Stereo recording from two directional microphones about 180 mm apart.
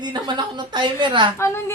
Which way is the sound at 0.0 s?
25° right (ahead or behind).